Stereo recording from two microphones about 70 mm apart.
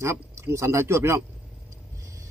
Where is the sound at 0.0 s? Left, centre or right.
Right.